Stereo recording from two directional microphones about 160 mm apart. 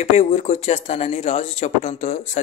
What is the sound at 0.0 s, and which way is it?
A man's voice, 45° left (ahead or behind).